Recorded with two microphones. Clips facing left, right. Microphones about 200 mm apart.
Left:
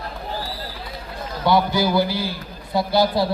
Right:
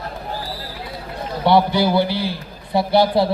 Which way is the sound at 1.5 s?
30° right (ahead or behind).